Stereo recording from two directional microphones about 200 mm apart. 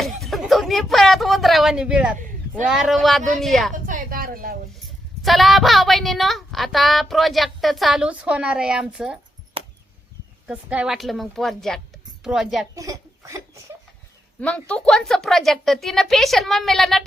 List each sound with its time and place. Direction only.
0.0 s a woman's voice: centre (ahead or behind)
3.8 s a sound: 40° right (ahead or behind)
5.2 s a woman's voice: centre (ahead or behind)
9.6 s a sound: 25° right (ahead or behind)
10.4 s a woman's voice: 5° right (ahead or behind)
12.7 s speech: 15° right (ahead or behind)
14.4 s a woman's voice: 5° left (ahead or behind)